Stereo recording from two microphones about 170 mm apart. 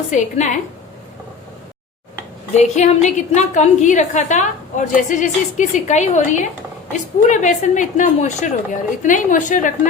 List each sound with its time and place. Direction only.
0.1 s a woman's voice: 45° left (ahead or behind)
2.5 s a woman's voice: 40° left (ahead or behind)